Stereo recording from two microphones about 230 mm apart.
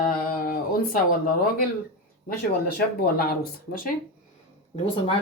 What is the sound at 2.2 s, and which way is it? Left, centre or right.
Speech, left.